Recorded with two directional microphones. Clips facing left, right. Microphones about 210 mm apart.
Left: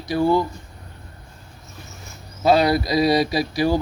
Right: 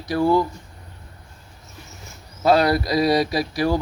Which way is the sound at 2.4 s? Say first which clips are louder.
Even; 25° left (ahead or behind).